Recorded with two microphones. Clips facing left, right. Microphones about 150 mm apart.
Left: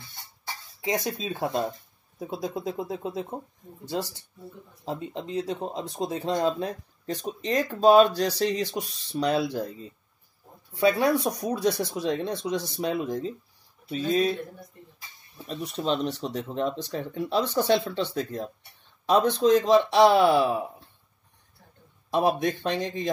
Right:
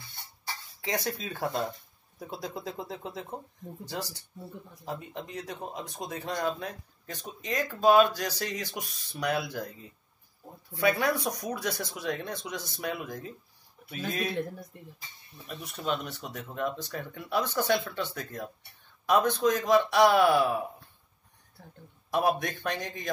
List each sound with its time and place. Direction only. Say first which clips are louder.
0.7 s speech: left 4 dB; 20° left (ahead or behind)
15.4 s speech: left 6 dB; 30° left (ahead or behind)
22.1 s speech: left 4 dB; 20° left (ahead or behind)